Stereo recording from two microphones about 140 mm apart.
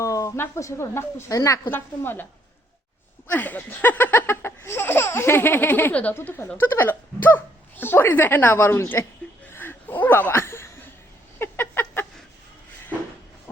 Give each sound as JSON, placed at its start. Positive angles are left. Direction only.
{"t": 0.0, "sound": "a woman's voice", "side_deg": 20}
{"t": 1.7, "sound": "laughter", "side_deg": 15}
{"t": 3.2, "sound": "laughter", "side_deg": 15}
{"t": 9.5, "sound": "a sound", "side_deg": 15}